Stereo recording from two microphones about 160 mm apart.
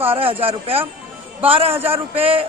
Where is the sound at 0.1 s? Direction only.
35° right (ahead or behind).